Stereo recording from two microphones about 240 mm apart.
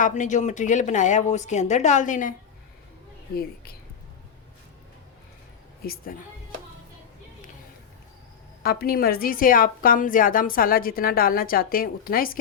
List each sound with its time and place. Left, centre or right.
0.0 s a woman's voice: left
5.8 s a woman's voice: left
8.6 s a woman's voice: left